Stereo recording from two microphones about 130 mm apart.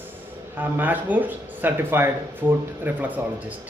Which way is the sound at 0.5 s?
15° right (ahead or behind).